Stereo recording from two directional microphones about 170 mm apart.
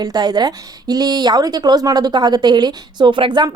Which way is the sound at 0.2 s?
25° right (ahead or behind).